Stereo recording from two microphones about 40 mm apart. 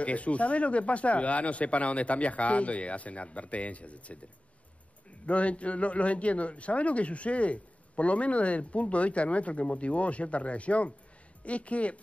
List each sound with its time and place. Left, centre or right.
0.0 s a man's voice: left
5.2 s a man's voice: left